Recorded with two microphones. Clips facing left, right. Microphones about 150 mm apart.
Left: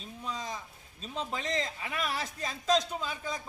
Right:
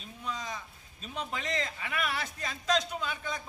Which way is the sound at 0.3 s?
30° left (ahead or behind).